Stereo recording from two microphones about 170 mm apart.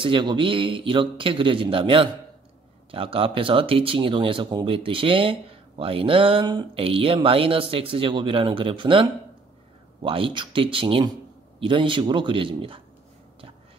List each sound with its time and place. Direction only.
0.0 s speech: 30° right (ahead or behind)
10.0 s speech: 30° right (ahead or behind)